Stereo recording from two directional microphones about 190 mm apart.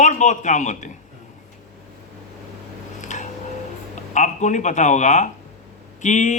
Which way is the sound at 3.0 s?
40° left (ahead or behind).